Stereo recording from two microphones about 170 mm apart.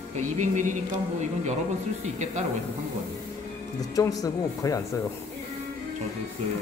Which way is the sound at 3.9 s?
20° left (ahead or behind).